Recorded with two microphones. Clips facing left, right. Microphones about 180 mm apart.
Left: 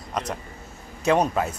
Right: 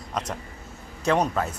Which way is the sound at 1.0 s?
10° left (ahead or behind).